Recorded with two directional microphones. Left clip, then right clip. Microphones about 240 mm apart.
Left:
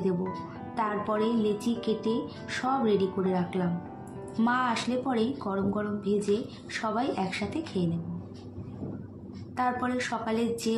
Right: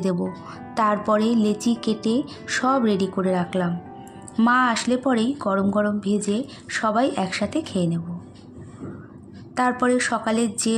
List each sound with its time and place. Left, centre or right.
0.7 s a woman's voice: right
9.6 s speech: right